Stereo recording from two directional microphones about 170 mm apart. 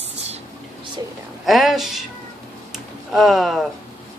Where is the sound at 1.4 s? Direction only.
Centre (ahead or behind).